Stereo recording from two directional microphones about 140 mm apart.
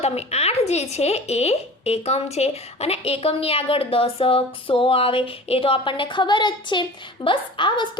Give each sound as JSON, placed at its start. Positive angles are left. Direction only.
{"t": 0.0, "sound": "speech", "side_deg": 50}